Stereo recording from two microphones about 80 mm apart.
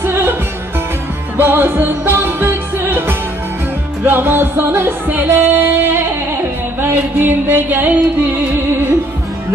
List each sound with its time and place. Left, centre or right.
0.0 s music: right